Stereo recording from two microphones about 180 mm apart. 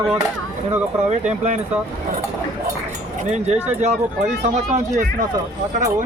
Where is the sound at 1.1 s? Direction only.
40° right (ahead or behind).